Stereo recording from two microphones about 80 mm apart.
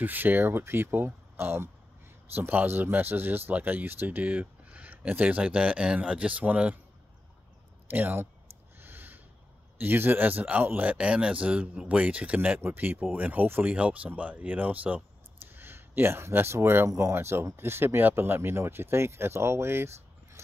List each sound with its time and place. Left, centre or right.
0.0 s speech: right
7.9 s speech: right
8.7 s snort: right
9.8 s speech: right